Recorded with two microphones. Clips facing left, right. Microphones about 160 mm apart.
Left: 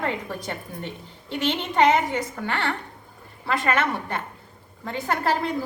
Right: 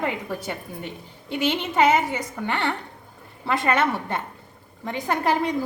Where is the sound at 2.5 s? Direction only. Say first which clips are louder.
Right 4 dB; 20° right (ahead or behind).